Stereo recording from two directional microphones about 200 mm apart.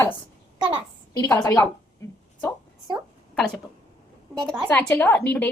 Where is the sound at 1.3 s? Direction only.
15° left (ahead or behind).